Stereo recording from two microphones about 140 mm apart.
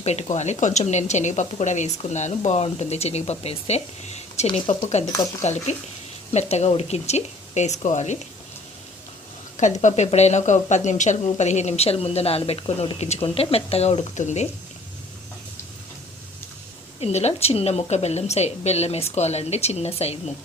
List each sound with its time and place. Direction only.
0.0 s speech: 50° left (ahead or behind)
9.6 s speech: 60° left (ahead or behind)
17.0 s speech: 50° left (ahead or behind)